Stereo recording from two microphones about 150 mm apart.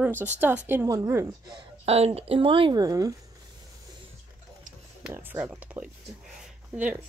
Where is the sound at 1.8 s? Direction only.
45° right (ahead or behind); by 3.1 s 25° right (ahead or behind).